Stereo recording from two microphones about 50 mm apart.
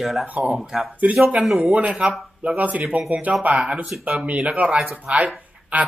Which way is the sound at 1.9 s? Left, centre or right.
Centre.